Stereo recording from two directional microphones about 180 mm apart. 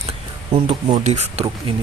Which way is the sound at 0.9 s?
40° right (ahead or behind).